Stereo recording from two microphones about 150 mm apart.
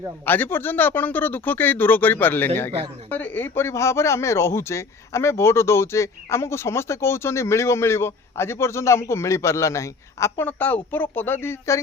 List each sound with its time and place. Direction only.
0.3 s speech: 10° left (ahead or behind)